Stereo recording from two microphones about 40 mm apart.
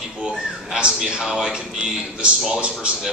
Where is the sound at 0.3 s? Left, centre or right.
Centre.